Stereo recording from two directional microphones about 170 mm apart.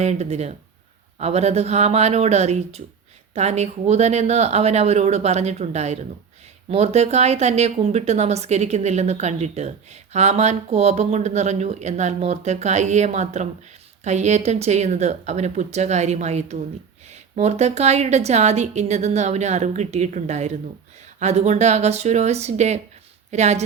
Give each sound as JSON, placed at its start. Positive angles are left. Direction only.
{"t": 0.0, "sound": "speech", "side_deg": -40}